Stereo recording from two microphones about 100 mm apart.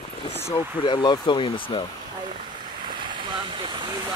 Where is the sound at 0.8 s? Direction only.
45° left (ahead or behind).